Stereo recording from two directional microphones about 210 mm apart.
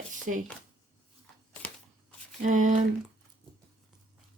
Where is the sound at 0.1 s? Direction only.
35° right (ahead or behind).